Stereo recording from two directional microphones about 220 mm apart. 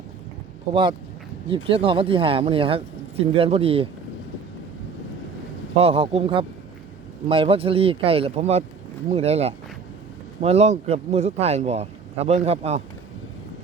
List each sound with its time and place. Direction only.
0.7 s speech: 20° right (ahead or behind)
5.7 s speech: 25° right (ahead or behind)